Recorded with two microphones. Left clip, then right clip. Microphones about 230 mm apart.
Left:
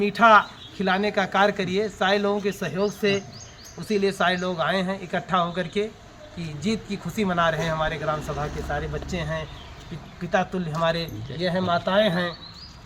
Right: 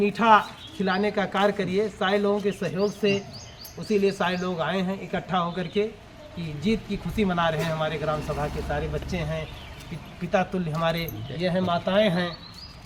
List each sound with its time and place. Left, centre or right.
0.0 s a man's voice: left; by 12.3 s centre